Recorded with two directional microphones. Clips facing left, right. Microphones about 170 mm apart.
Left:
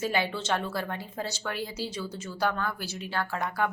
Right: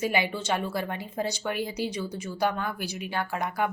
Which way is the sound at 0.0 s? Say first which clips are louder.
Right 2 dB; 15° right (ahead or behind).